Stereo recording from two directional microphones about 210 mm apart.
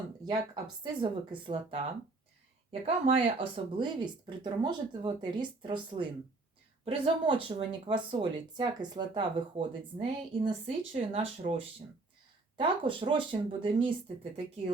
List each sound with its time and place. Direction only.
0.3 s speech: 20° right (ahead or behind)
2.8 s speech: 30° right (ahead or behind)
12.5 s speech: 25° right (ahead or behind)